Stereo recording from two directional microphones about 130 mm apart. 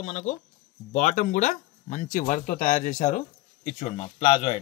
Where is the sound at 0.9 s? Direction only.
85° left.